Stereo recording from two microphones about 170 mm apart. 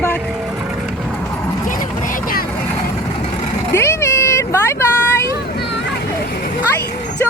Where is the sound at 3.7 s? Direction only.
15° left (ahead or behind).